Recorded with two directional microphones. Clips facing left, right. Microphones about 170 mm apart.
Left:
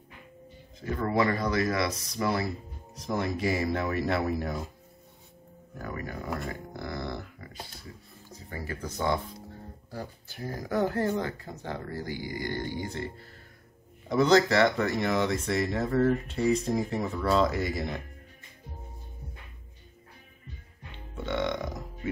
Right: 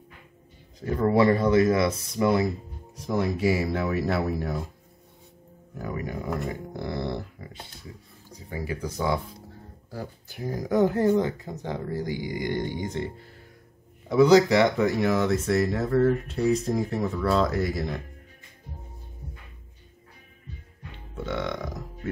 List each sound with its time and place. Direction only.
0.9 s speech: 30° right (ahead or behind)
3.1 s speech: 5° right (ahead or behind)
5.8 s speech: 15° right (ahead or behind)
6.5 s dog: 25° right (ahead or behind)
8.3 s speech: 15° right (ahead or behind)
21.3 s speech: centre (ahead or behind)